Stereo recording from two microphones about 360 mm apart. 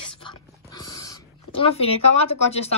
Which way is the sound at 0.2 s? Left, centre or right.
Centre.